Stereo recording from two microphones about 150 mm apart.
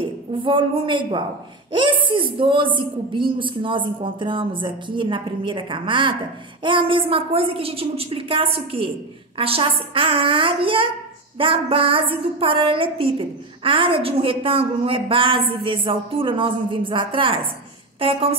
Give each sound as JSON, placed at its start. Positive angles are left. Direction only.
{"t": 0.0, "sound": "a woman's voice", "side_deg": -35}